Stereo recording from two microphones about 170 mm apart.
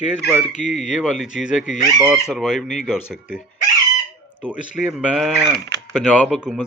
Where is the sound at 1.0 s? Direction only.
5° right (ahead or behind).